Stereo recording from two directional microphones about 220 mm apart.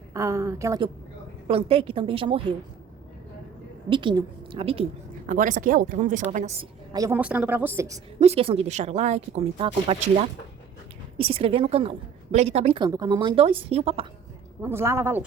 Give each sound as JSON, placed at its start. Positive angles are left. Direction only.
{"t": 0.1, "sound": "a woman's voice", "side_deg": -15}
{"t": 1.5, "sound": "a woman's voice", "side_deg": -25}
{"t": 3.8, "sound": "a woman's voice", "side_deg": -20}
{"t": 6.9, "sound": "a woman's voice", "side_deg": -10}
{"t": 8.2, "sound": "a woman's voice", "side_deg": -25}
{"t": 11.2, "sound": "a woman's voice", "side_deg": -25}
{"t": 14.6, "sound": "a woman's voice", "side_deg": -10}